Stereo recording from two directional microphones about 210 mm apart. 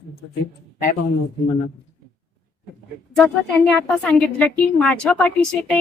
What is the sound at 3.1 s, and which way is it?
A woman's voice, 5° left (ahead or behind).